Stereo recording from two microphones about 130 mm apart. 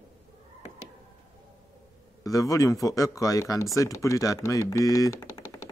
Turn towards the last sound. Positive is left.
turn(degrees=30)  # may be behind; listen again after turning